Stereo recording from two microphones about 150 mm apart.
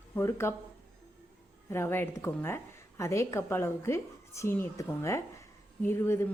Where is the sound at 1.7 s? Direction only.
15° left (ahead or behind).